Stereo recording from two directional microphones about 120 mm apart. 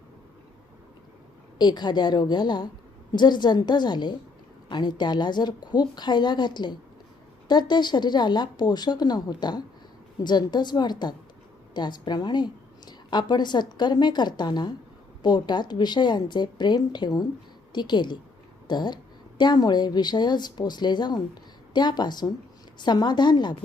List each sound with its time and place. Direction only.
1.5 s a woman's voice: 35° left (ahead or behind)